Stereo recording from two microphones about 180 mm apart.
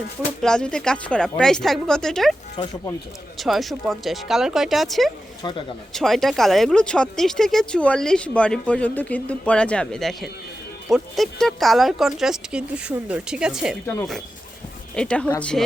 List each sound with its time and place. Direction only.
0.3 s speech: 5° left (ahead or behind)
3.3 s speech: centre (ahead or behind)
5.4 s speech: 25° left (ahead or behind)
5.9 s speech: centre (ahead or behind)
14.9 s speech: 5° left (ahead or behind)